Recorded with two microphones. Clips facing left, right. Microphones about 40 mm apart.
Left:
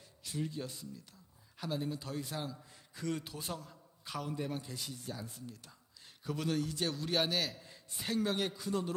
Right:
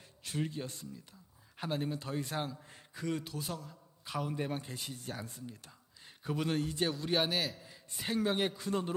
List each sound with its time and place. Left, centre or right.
0.2 s speech: right
2.2 s speech: right
2.9 s speech: centre
4.4 s speech: right
6.1 s a sound: centre
6.5 s speech: right
6.8 s a man's voice: centre
8.0 s speech: centre